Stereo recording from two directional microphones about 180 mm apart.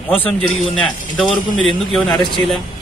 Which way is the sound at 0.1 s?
10° left (ahead or behind).